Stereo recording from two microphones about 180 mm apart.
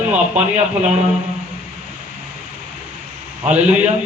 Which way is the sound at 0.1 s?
40° right (ahead or behind).